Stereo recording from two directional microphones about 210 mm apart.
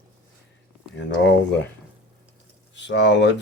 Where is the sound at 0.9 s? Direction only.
60° left (ahead or behind).